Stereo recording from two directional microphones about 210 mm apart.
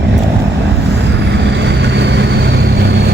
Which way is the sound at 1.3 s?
55° right (ahead or behind).